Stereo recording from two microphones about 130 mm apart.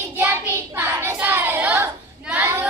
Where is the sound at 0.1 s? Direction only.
15° right (ahead or behind).